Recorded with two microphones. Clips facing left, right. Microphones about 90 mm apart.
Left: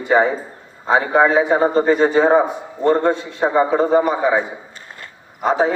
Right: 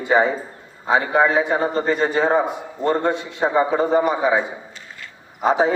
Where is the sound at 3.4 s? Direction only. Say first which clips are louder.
Left 2 dB; centre (ahead or behind).